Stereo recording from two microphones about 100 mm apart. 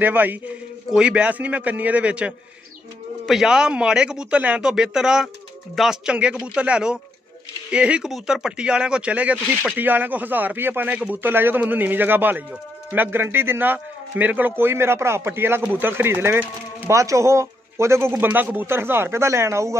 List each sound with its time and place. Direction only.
0.0 s speech: 15° right (ahead or behind)